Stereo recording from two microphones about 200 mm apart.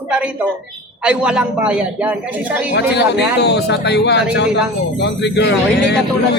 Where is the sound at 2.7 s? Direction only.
55° left (ahead or behind).